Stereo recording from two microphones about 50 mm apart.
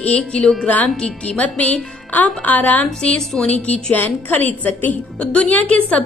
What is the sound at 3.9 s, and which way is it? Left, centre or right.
Speech, left.